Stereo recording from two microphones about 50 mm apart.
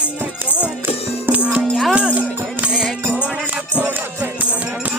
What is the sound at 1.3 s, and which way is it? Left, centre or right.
Music, right.